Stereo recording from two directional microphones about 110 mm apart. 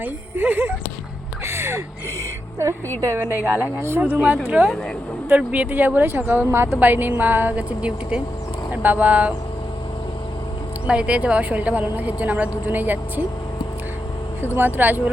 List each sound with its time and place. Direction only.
0.0 s speech: 15° right (ahead or behind)
1.5 s a sound: 25° right (ahead or behind)
3.2 s speech: 15° right (ahead or behind)
10.8 s speech: 10° right (ahead or behind)
14.5 s speech: 15° right (ahead or behind)